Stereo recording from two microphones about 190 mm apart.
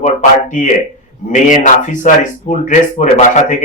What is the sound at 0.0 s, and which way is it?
A man's voice, 40° left (ahead or behind).